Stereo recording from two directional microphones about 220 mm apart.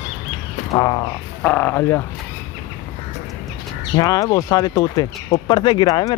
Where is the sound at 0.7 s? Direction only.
20° left (ahead or behind).